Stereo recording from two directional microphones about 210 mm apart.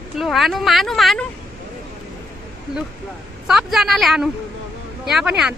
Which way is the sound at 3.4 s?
Centre (ahead or behind).